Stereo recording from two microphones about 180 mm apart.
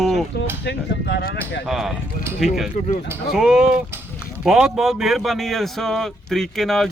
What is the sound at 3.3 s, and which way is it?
Speech, 5° right (ahead or behind).